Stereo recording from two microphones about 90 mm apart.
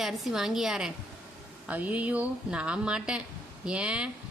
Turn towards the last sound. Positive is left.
turn(degrees=-10)  # may be behind; listen again after turning